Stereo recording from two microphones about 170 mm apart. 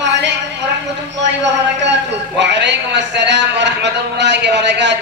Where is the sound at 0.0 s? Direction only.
90° right.